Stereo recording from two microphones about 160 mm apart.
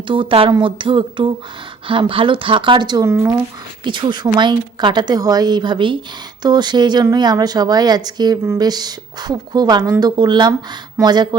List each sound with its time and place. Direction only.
0.1 s a woman's voice: 35° right (ahead or behind)